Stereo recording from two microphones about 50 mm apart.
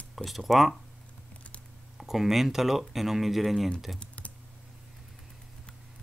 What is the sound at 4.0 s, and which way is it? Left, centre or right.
Typing, left.